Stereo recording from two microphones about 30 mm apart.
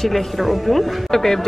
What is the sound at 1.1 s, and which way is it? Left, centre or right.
Speech, centre.